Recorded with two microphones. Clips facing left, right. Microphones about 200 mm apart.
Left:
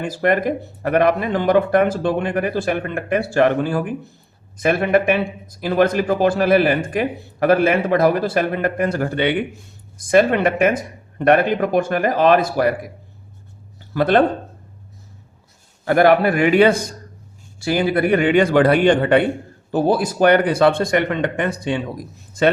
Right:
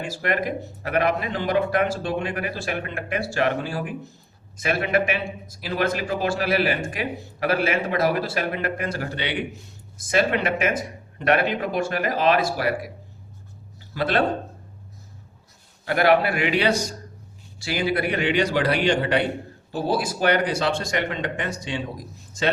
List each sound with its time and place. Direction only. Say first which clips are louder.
0.0 s a man's voice: left 7 dB; 50° left (ahead or behind)
13.9 s speech: left 8 dB; 50° left (ahead or behind)
15.8 s a man's voice: left 5 dB; 50° left (ahead or behind)